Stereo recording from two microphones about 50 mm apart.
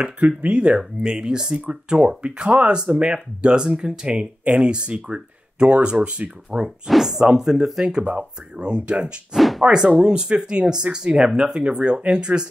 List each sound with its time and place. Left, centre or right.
0.4 s speech: right
6.9 s speech: centre
8.1 s speech: right
9.6 s speech: centre